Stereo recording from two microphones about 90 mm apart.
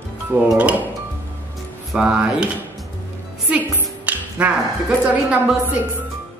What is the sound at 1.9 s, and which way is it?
Speech, 10° right (ahead or behind).